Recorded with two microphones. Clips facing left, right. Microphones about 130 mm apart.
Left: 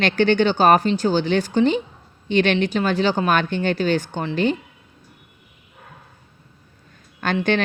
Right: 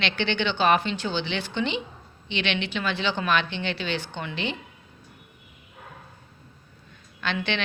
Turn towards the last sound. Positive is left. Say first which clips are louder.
# left 6 dB
turn(degrees=45)  # may be behind; listen again after turning